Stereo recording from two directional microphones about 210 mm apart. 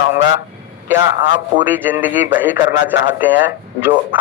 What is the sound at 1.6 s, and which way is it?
A man's voice, 10° right (ahead or behind).